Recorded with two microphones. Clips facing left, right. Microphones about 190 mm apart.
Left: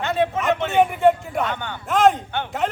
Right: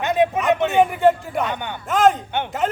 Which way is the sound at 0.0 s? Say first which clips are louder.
Right 3 dB; 15° right (ahead or behind).